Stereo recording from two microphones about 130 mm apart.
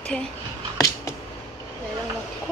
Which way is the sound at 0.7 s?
25° left (ahead or behind).